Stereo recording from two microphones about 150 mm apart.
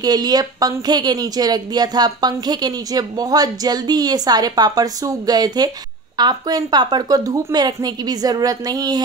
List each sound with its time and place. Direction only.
0.0 s a woman's voice: 25° right (ahead or behind)